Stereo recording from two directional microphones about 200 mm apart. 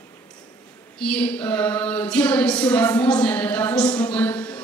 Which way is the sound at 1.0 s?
5° left (ahead or behind).